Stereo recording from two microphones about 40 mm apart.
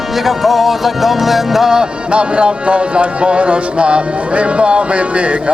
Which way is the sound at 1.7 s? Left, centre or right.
Right.